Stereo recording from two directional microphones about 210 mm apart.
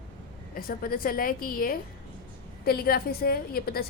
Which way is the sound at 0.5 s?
45° left (ahead or behind).